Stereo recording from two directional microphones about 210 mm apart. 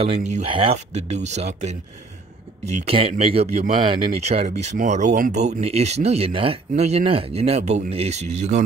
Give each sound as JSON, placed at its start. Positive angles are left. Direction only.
{"t": 0.0, "sound": "speech", "side_deg": -30}
{"t": 2.9, "sound": "speech", "side_deg": -25}